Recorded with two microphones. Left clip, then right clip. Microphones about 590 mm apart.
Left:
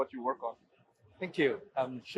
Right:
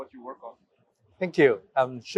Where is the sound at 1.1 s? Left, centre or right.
Right.